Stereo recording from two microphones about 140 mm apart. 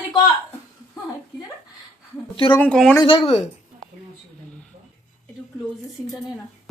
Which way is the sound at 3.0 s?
30° left (ahead or behind).